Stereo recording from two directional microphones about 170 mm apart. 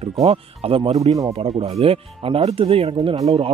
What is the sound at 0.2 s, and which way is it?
Speech, 35° right (ahead or behind).